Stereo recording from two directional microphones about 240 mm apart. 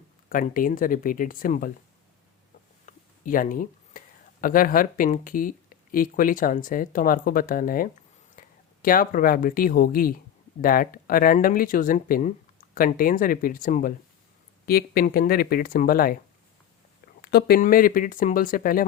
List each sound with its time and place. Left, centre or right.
0.3 s speech: left
2.8 s speech: left
17.2 s speech: left